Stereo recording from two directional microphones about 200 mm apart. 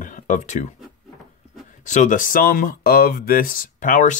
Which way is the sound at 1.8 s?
40° left (ahead or behind).